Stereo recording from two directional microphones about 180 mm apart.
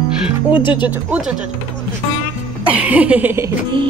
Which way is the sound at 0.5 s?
25° left (ahead or behind).